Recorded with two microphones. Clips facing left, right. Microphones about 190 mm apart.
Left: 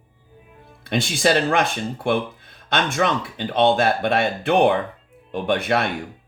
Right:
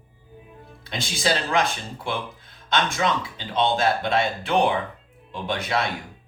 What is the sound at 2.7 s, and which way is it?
A man's voice, 60° left (ahead or behind).